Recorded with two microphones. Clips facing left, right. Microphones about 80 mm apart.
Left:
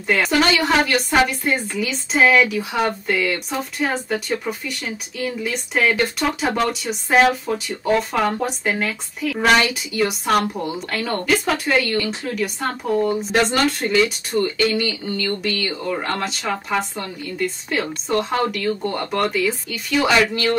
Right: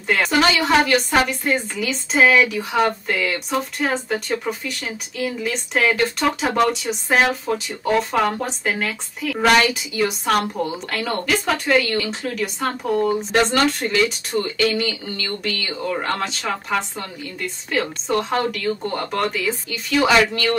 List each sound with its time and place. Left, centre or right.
0.0 s speech: centre
17.6 s speech: centre